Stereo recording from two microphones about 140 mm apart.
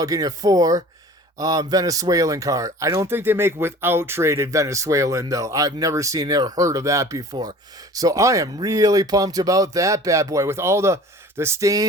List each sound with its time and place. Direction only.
0.0 s a man's voice: 25° right (ahead or behind)